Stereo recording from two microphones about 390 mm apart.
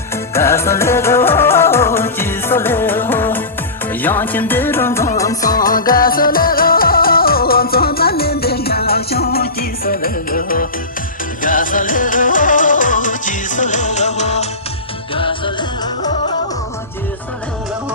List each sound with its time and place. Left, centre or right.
0.3 s music: centre
5.1 s music of bollywood: centre
5.7 s music: left
11.4 s music of bollywood: left
15.1 s music: centre